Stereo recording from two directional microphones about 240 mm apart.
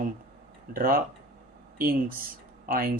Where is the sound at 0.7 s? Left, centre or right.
Right.